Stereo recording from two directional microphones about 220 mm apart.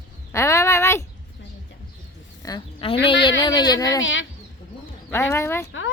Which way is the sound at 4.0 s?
60° left (ahead or behind).